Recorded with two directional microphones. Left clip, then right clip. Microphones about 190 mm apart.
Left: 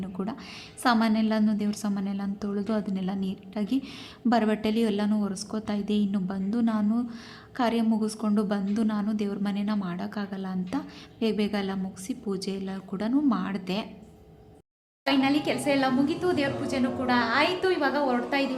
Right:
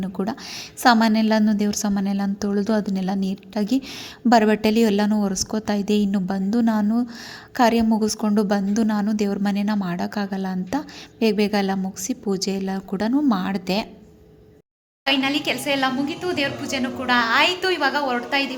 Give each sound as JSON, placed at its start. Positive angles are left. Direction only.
{"t": 0.0, "sound": "a woman's voice", "side_deg": -30}
{"t": 15.0, "sound": "a woman's voice", "side_deg": 0}